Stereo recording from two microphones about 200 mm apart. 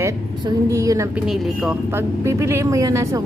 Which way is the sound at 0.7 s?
15° right (ahead or behind).